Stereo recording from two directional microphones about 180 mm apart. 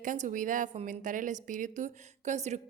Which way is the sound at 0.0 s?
45° right (ahead or behind).